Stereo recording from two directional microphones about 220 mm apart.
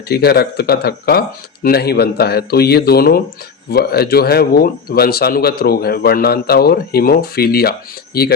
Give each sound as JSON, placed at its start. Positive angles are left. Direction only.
{"t": 0.1, "sound": "speech", "side_deg": 45}